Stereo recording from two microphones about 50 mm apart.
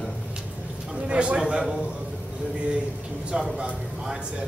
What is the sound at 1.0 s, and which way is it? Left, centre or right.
Speech, right.